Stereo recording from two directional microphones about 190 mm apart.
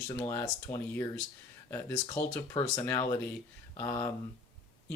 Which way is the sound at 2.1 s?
15° left (ahead or behind).